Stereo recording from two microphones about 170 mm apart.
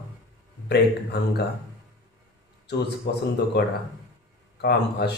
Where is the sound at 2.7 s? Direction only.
80° left.